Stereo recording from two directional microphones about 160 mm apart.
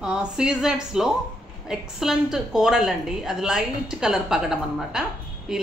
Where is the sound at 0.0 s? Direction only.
5° right (ahead or behind).